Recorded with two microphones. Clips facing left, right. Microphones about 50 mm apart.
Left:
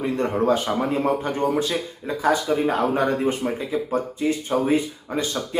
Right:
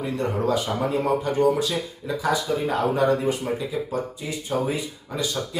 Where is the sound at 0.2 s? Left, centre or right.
Left.